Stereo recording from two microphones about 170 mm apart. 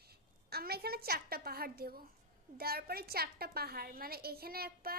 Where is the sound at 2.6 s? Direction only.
65° right (ahead or behind).